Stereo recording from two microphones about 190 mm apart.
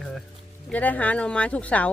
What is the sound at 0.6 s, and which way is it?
Speech, 10° left (ahead or behind).